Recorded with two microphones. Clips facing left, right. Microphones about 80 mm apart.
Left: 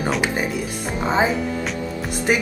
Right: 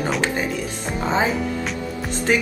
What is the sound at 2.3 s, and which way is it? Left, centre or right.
Speech, centre.